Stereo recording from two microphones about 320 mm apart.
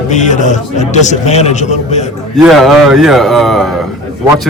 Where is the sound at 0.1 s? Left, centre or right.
Left.